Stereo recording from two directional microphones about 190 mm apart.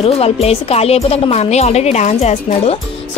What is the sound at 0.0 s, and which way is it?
A woman's voice, 30° left (ahead or behind).